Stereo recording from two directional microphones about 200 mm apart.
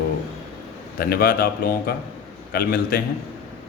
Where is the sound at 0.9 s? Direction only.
50° left (ahead or behind).